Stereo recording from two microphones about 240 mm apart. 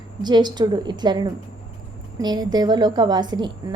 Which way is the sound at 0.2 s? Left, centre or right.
Centre.